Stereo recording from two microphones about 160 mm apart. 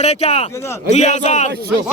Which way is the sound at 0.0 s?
40° left (ahead or behind).